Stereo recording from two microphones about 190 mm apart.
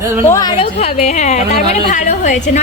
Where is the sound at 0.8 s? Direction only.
40° left (ahead or behind).